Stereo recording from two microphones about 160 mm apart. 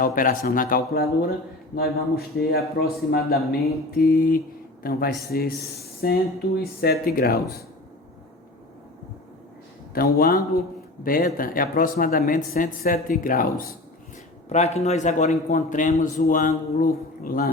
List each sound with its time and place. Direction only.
0.0 s speech: 60° left (ahead or behind)
1.7 s a man's voice: 75° left (ahead or behind)
9.9 s a man's voice: 70° left (ahead or behind)
14.5 s a man's voice: 45° left (ahead or behind); by 17.5 s 65° left (ahead or behind)